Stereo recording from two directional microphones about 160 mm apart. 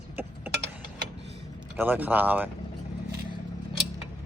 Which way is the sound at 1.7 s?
10° right (ahead or behind).